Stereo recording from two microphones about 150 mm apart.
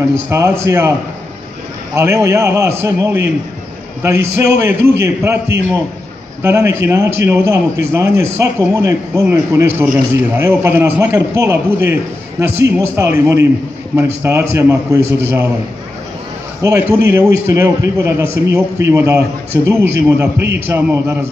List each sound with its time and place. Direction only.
0.1 s a man's voice: 20° right (ahead or behind)
2.0 s a man's voice: 20° right (ahead or behind)
16.6 s a man's voice: 15° right (ahead or behind)